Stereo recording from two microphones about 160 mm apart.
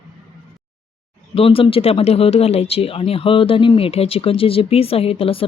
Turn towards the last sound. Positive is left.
turn(degrees=35)  # may be behind; listen again after turning